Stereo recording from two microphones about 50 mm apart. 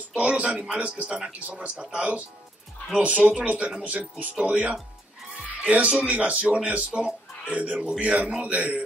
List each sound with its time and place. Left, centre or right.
0.1 s speech: right
0.7 s speech: right
1.0 s speech: centre